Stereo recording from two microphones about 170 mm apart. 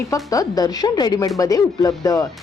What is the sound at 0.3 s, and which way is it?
A woman's voice, 20° left (ahead or behind).